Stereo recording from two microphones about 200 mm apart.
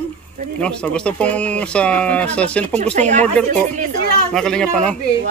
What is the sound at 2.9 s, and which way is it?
Speech, 35° right (ahead or behind).